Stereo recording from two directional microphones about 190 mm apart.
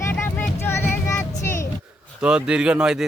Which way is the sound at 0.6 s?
10° left (ahead or behind).